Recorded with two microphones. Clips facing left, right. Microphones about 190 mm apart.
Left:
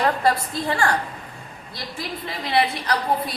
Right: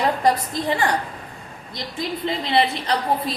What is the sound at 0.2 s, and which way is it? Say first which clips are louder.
Speech: right 2 dB; 15° right (ahead or behind).